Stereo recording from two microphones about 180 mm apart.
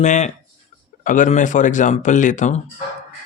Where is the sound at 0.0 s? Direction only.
40° left (ahead or behind).